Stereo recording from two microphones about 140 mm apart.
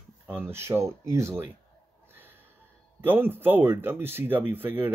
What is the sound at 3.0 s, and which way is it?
Speech, 15° right (ahead or behind).